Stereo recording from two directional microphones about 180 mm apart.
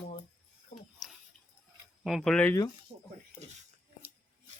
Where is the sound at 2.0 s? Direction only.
Centre (ahead or behind).